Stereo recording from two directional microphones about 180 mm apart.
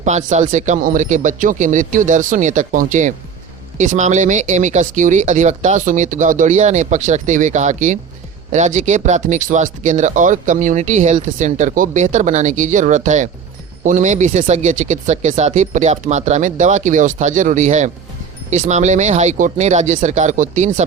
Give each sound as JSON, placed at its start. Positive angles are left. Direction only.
{"t": 0.0, "sound": "speech", "side_deg": -40}